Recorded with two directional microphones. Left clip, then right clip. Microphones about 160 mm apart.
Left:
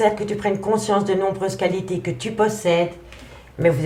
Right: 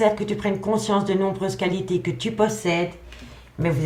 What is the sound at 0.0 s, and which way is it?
A woman's voice, 25° left (ahead or behind).